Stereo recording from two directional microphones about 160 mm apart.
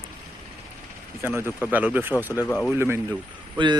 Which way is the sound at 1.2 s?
15° right (ahead or behind).